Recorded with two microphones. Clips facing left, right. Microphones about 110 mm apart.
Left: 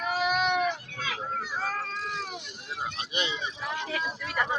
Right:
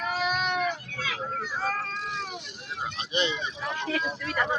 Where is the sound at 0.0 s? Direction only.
10° left (ahead or behind).